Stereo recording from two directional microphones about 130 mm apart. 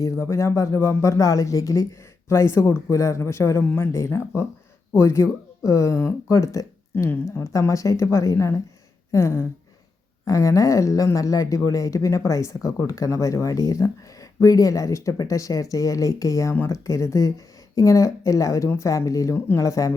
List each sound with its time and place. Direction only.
0.0 s speech: 25° left (ahead or behind)